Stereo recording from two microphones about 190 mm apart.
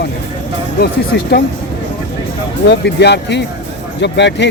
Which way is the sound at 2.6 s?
65° left (ahead or behind).